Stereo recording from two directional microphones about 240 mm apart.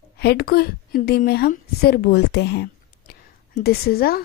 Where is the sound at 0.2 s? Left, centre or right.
Left.